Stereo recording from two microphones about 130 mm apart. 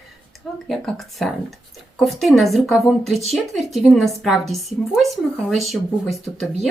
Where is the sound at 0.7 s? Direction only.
Centre (ahead or behind).